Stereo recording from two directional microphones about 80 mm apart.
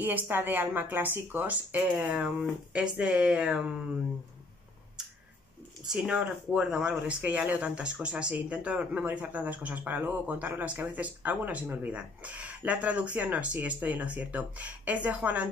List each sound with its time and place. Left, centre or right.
0.3 s speech: right
2.1 s speech: centre
5.9 s speech: centre